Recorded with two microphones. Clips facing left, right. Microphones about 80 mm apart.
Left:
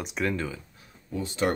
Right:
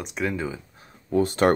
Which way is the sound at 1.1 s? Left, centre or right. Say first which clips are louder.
Right 8 dB; right.